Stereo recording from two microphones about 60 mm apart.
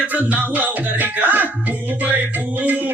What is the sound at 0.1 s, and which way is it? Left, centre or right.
Music, right.